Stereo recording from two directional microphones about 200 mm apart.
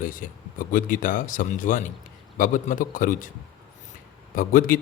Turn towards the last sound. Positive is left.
turn(degrees=45)  # may be behind; listen again after turning